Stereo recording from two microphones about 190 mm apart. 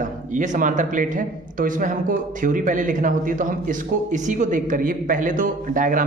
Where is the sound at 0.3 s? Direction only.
40° right (ahead or behind).